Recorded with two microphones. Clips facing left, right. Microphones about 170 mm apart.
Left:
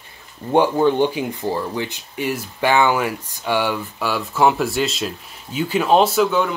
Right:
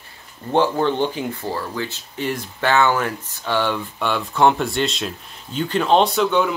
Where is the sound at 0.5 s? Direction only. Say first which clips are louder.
Left 3 dB; 10° left (ahead or behind).